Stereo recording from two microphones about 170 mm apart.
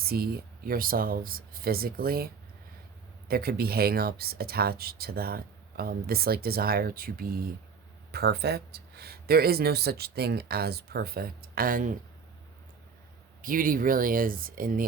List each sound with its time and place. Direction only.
0.0 s speech: 65° right (ahead or behind)
8.1 s speech: 70° right (ahead or behind); by 11.9 s 55° right (ahead or behind)
13.4 s speech: 55° right (ahead or behind)